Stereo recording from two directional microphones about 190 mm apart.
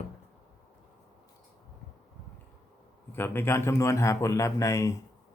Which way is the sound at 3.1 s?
10° left (ahead or behind).